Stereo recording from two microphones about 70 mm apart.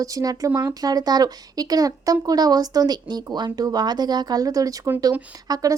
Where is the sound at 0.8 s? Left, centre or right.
Right.